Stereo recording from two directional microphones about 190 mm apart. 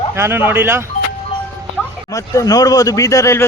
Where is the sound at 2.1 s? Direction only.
15° left (ahead or behind).